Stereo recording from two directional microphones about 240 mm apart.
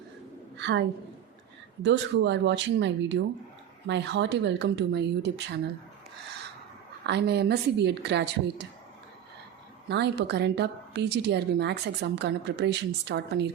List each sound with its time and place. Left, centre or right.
0.5 s a woman's voice: right
7.0 s a woman's voice: right
9.9 s a woman's voice: right